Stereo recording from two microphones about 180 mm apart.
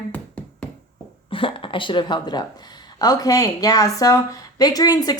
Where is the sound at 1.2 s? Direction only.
30° left (ahead or behind).